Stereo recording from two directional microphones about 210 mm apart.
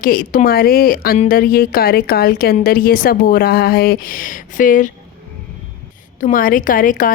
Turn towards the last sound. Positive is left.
turn(degrees=40)  # may be behind; listen again after turning